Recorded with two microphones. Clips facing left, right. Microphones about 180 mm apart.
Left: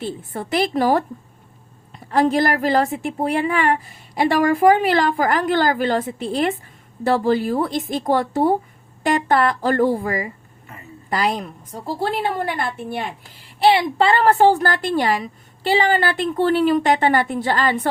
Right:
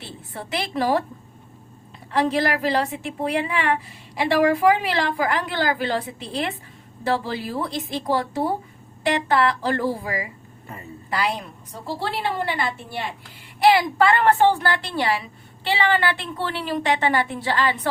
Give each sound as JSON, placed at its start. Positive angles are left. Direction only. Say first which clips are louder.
{"t": 0.0, "sound": "a woman's voice", "louder": "left 8 dB", "side_deg": 45}
{"t": 2.0, "sound": "a woman's voice", "louder": "left 4 dB", "side_deg": 45}
{"t": 13.6, "sound": "a woman's voice", "louder": "left 1 dB", "side_deg": 30}